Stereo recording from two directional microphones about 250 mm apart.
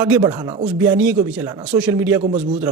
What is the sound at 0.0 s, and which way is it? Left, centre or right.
A man's voice, centre.